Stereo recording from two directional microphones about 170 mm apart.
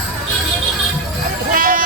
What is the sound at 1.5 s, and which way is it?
Music, 55° right (ahead or behind).